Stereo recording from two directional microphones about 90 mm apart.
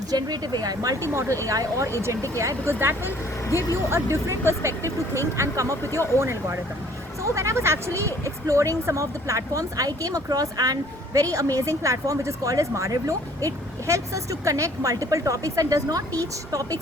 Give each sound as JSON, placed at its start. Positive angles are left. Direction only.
{"t": 0.1, "sound": "speech", "side_deg": -50}
{"t": 3.5, "sound": "speech", "side_deg": 35}
{"t": 3.8, "sound": "speech", "side_deg": -30}
{"t": 5.8, "sound": "speech", "side_deg": 25}
{"t": 6.1, "sound": "speech", "side_deg": -30}